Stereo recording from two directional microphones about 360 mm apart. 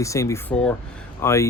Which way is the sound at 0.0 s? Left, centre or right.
Centre.